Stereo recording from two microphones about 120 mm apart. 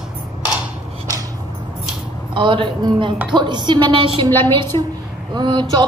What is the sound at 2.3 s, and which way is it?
A woman's voice, 45° right (ahead or behind).